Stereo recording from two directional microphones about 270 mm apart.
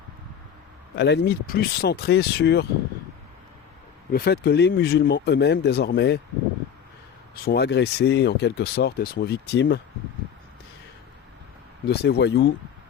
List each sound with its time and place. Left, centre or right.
0.9 s speech: left
4.1 s speech: left
7.3 s speech: left
11.9 s speech: left